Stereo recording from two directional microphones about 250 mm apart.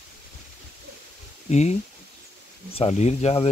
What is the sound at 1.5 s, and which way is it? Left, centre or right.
Speech, left.